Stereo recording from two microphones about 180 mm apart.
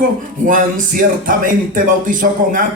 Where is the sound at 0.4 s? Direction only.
50° right (ahead or behind).